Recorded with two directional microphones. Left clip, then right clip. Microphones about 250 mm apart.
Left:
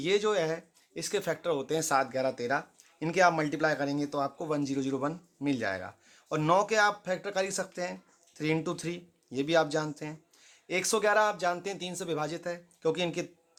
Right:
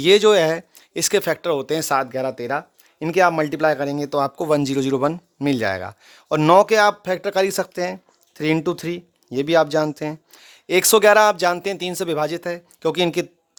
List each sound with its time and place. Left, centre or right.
0.0 s speech: right